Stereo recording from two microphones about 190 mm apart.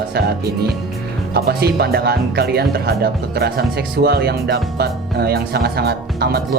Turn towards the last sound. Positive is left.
turn(degrees=-55)  # may be behind; listen again after turning